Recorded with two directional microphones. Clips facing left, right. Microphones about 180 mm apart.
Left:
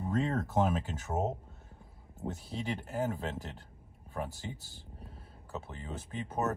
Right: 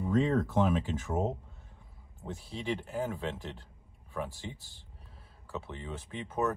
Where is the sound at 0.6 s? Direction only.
40° left (ahead or behind).